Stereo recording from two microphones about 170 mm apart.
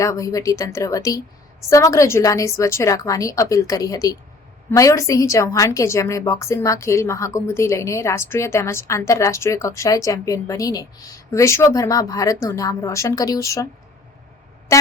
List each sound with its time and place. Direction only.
0.0 s a woman's voice: 20° left (ahead or behind)
14.7 s music: 20° left (ahead or behind)